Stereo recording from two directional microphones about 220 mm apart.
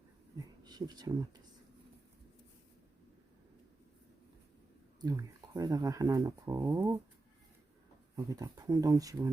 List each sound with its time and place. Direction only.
0.6 s a sound: 20° right (ahead or behind)
4.9 s speech: 15° right (ahead or behind)
8.1 s speech: 15° right (ahead or behind)